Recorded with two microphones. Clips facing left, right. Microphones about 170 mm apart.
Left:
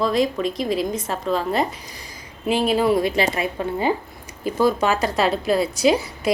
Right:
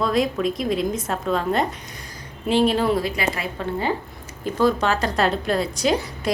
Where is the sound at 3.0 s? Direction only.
25° left (ahead or behind).